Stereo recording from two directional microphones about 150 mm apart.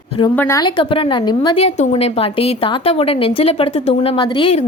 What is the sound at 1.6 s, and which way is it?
A woman's voice, 50° left (ahead or behind).